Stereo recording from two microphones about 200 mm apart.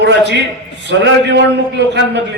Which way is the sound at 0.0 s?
60° right (ahead or behind).